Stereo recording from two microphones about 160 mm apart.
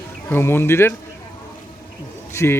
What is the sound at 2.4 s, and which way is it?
Speech, 15° left (ahead or behind).